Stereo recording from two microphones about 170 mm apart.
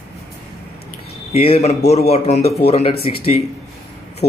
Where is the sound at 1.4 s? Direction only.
40° left (ahead or behind).